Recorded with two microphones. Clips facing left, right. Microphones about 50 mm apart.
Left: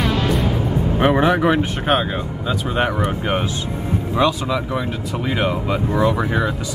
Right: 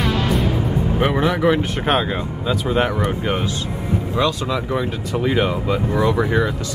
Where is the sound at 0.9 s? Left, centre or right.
Centre.